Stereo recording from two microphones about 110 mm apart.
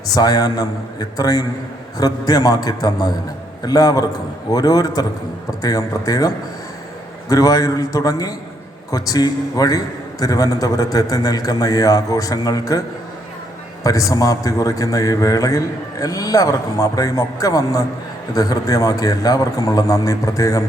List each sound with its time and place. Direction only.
0.1 s a man's voice: 35° left (ahead or behind)
13.8 s a man's voice: 30° left (ahead or behind)